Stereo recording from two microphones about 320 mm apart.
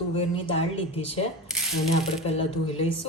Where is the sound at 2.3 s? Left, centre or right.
Centre.